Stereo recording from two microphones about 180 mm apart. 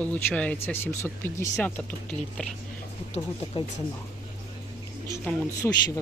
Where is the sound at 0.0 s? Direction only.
10° left (ahead or behind).